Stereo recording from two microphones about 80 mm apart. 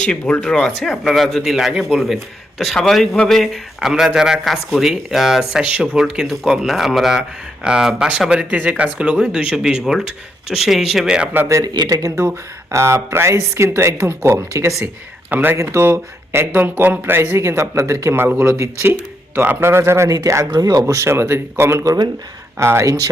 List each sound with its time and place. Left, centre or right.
0.0 s speech: centre
11.4 s speech: right
11.7 s speech: right
15.3 s speech: right
15.5 s speech: right
20.1 s speech: right
21.8 s speech: right
22.5 s speech: right